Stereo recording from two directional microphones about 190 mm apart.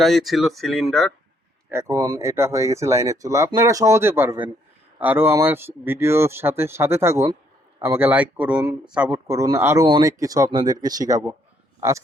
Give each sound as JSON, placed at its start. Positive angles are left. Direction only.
{"t": 0.0, "sound": "speech", "side_deg": 0}
{"t": 1.7, "sound": "a man's voice", "side_deg": -15}